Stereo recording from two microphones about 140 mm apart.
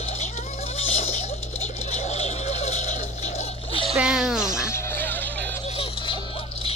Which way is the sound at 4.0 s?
5° right (ahead or behind).